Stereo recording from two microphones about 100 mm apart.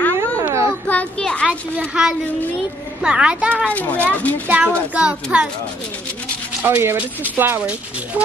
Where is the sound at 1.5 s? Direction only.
10° right (ahead or behind).